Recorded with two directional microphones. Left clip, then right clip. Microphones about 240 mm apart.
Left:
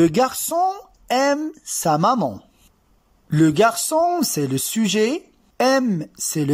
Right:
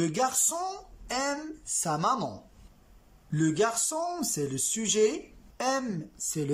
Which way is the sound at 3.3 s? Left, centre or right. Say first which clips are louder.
Left 11 dB; left.